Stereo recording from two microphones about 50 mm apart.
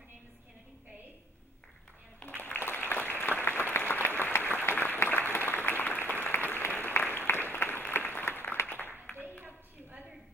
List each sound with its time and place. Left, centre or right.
2.4 s applause: left